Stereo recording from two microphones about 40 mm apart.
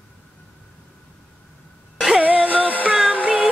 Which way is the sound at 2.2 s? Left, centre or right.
Right.